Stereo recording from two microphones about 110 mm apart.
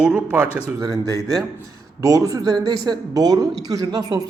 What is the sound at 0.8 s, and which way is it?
Speech, 35° right (ahead or behind).